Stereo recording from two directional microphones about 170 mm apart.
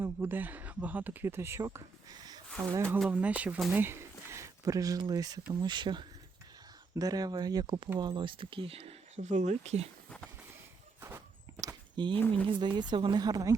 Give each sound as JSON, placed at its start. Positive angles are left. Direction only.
{"t": 0.0, "sound": "speech", "side_deg": -10}
{"t": 2.5, "sound": "speech", "side_deg": 5}
{"t": 3.0, "sound": "a woman's voice", "side_deg": -10}
{"t": 11.0, "sound": "walk", "side_deg": -15}
{"t": 12.3, "sound": "a woman's voice", "side_deg": -30}